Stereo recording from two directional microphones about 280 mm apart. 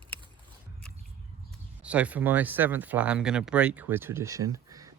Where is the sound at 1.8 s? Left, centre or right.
Centre.